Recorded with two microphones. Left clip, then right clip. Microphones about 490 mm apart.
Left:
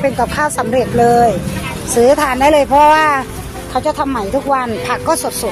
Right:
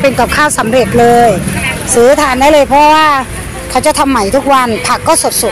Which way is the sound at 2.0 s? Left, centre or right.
Left.